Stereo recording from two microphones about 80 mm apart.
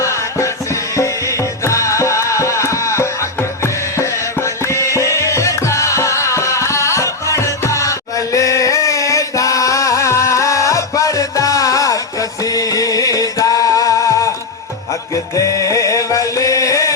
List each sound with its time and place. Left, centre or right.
0.0 s music: left